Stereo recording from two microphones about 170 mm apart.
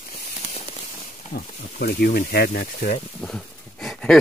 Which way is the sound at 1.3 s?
65° left (ahead or behind).